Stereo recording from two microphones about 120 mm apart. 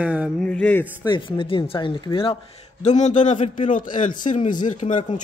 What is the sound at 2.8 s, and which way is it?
A man's voice, 80° left.